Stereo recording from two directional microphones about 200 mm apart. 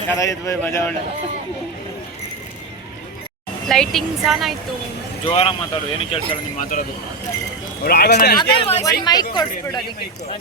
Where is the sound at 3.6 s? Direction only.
Centre (ahead or behind).